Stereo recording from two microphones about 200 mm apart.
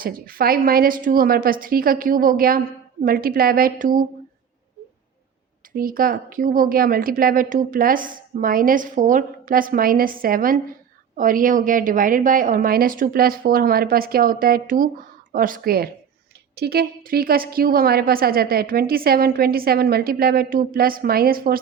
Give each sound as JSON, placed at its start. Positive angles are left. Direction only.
{"t": 0.0, "sound": "a woman's voice", "side_deg": -45}
{"t": 5.7, "sound": "a woman's voice", "side_deg": -45}